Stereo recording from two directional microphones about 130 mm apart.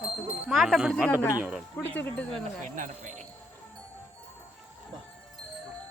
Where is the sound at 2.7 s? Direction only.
75° right (ahead or behind).